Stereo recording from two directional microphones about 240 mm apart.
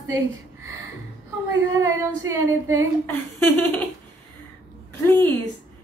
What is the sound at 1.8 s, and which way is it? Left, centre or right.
Speech, centre.